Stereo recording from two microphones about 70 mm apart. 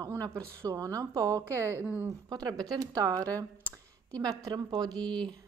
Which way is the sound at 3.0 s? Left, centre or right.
Right.